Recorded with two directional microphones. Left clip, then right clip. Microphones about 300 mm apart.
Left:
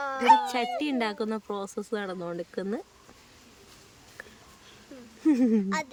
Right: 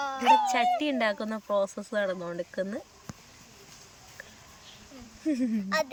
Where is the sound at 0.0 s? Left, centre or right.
Centre.